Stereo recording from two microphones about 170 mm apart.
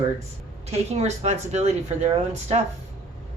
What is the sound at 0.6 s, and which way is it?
A woman's voice, 40° right (ahead or behind).